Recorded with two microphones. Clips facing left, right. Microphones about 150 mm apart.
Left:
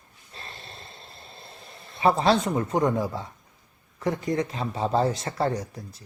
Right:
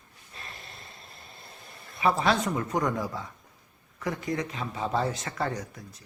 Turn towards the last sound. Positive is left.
turn(degrees=30)  # may be behind; listen again after turning